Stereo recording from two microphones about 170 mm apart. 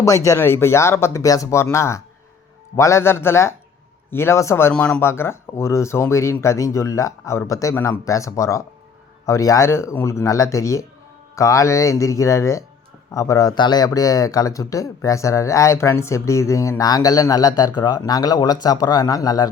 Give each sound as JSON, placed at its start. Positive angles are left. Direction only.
{"t": 0.0, "sound": "speech", "side_deg": 20}